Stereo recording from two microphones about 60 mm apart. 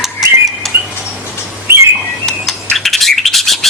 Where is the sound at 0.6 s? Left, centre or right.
Centre.